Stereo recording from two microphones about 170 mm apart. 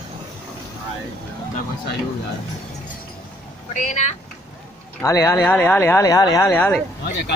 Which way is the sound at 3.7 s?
45° left (ahead or behind).